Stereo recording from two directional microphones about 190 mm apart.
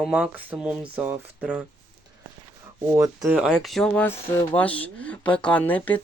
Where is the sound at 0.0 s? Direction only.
5° right (ahead or behind).